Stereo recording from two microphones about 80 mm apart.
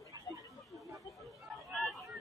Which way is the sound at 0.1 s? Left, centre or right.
Right.